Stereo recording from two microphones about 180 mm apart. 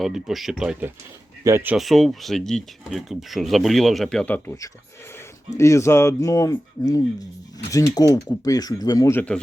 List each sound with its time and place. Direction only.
0.0 s speech: centre (ahead or behind)
1.7 s speech: centre (ahead or behind)